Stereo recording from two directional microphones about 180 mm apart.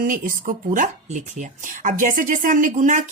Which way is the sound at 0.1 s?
50° right (ahead or behind).